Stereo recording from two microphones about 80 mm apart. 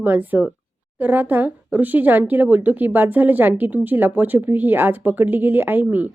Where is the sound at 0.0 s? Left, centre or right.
Right.